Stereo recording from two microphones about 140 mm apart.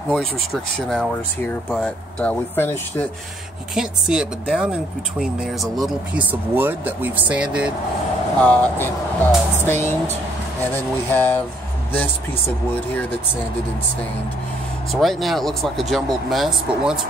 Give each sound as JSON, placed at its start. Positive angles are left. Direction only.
{"t": 0.7, "sound": "speech", "side_deg": 5}
{"t": 3.7, "sound": "speech", "side_deg": -5}
{"t": 6.5, "sound": "speech", "side_deg": -15}
{"t": 8.4, "sound": "speech", "side_deg": 10}
{"t": 14.9, "sound": "speech", "side_deg": 0}